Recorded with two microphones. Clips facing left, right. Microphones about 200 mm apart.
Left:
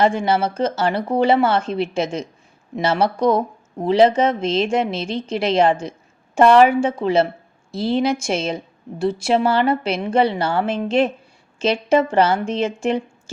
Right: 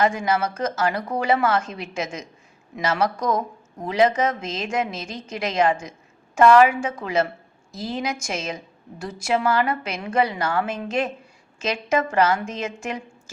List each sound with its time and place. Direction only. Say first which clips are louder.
0.0 s a woman's voice: left 4 dB; 30° left (ahead or behind)